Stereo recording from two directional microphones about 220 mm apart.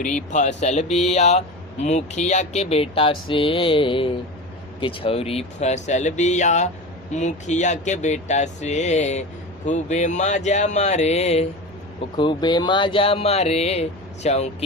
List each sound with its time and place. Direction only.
0.0 s speech: 35° left (ahead or behind)